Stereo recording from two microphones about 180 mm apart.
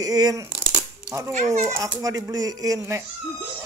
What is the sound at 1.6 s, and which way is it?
A child's voice, 15° right (ahead or behind).